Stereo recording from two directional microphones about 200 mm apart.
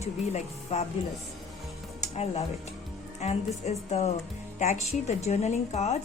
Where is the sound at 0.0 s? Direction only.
35° left (ahead or behind).